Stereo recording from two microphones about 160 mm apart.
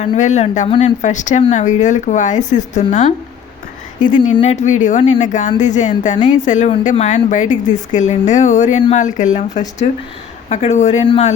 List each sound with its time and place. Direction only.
0.0 s speech: 45° left (ahead or behind)
11.0 s speech: 30° left (ahead or behind)